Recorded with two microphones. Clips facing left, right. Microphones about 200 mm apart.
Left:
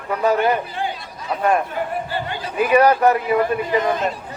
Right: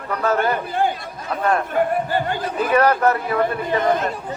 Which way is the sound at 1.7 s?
50° right (ahead or behind).